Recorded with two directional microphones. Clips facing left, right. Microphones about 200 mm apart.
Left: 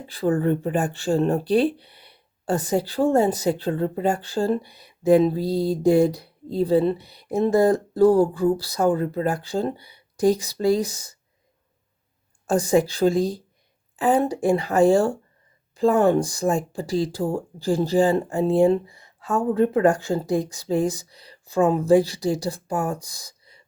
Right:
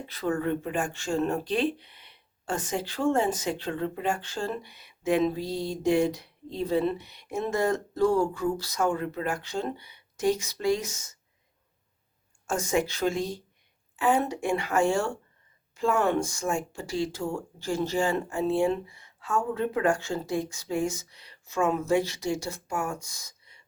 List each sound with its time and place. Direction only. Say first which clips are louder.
0.1 s speech: left 7 dB; 30° left (ahead or behind)
12.5 s speech: left 7 dB; 35° left (ahead or behind)